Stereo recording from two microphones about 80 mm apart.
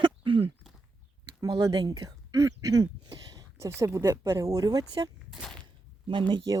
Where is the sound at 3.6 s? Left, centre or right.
Right.